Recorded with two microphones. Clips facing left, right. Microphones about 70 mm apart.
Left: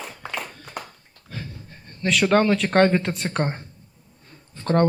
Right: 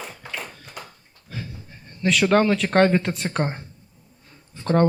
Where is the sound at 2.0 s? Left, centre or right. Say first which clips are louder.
Even; centre.